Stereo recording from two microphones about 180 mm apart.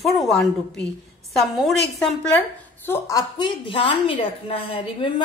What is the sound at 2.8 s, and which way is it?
A woman's voice, 15° left (ahead or behind).